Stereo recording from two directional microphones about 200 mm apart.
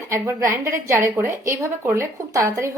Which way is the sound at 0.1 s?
15° right (ahead or behind).